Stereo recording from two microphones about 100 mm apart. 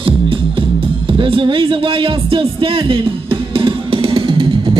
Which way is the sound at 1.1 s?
60° right (ahead or behind).